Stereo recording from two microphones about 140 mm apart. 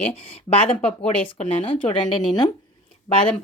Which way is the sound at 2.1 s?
30° left (ahead or behind).